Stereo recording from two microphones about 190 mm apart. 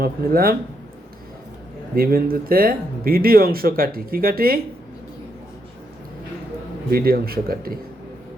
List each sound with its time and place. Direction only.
0.0 s speech: 50° right (ahead or behind)
2.0 s speech: 50° right (ahead or behind)
6.9 s speech: 55° right (ahead or behind)